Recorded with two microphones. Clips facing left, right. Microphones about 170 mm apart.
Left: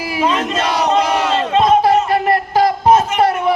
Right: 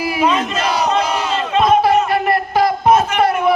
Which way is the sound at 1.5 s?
35° left (ahead or behind).